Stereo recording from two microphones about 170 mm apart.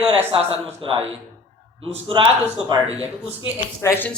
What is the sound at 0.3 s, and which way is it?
A man's voice, 35° right (ahead or behind).